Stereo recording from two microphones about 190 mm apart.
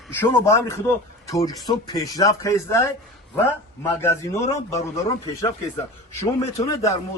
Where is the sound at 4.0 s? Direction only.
15° left (ahead or behind).